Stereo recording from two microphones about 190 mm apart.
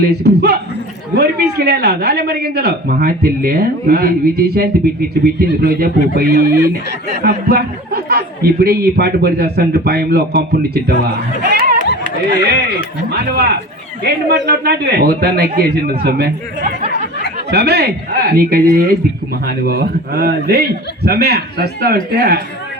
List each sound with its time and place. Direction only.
0.0 s speech: 60° right (ahead or behind)
11.4 s a sound: 50° right (ahead or behind)
13.1 s speech: 55° right (ahead or behind)